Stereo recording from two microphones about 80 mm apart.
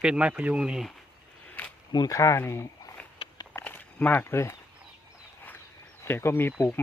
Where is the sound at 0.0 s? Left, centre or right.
Centre.